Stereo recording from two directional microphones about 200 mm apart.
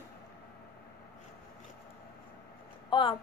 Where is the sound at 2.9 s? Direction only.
25° left (ahead or behind).